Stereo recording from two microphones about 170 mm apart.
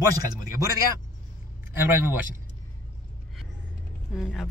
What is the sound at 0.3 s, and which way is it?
Speech, 20° right (ahead or behind).